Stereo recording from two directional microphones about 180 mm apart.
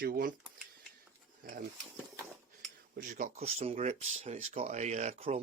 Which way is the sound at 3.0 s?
45° right (ahead or behind).